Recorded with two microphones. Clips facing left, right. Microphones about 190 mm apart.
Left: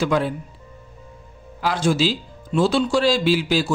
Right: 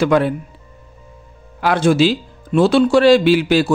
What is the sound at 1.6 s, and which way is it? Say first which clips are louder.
Speech: right 6 dB; 60° right (ahead or behind).